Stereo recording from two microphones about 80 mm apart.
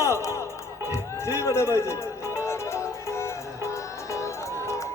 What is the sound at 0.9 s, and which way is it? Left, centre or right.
Music, left.